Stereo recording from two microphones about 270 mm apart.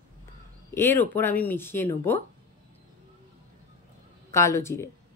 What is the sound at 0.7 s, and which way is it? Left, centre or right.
Speech, centre.